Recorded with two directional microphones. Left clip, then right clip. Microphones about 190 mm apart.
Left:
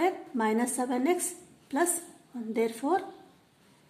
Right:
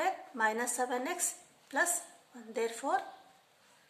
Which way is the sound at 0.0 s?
10° left (ahead or behind).